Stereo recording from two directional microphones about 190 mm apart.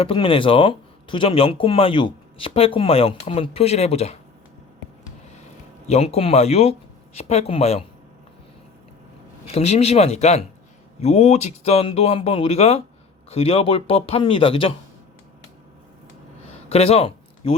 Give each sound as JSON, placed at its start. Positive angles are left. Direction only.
{"t": 0.0, "sound": "speech", "side_deg": 30}
{"t": 5.9, "sound": "speech", "side_deg": 30}
{"t": 9.5, "sound": "speech", "side_deg": 35}
{"t": 16.6, "sound": "a sound", "side_deg": 35}